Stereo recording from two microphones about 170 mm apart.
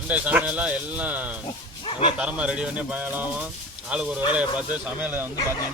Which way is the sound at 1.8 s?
30° left (ahead or behind).